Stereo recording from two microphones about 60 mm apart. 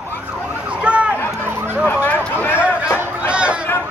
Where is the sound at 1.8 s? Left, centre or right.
Left.